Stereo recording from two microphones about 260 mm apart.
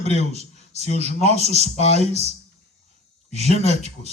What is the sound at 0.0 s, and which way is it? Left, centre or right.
A man's voice, left.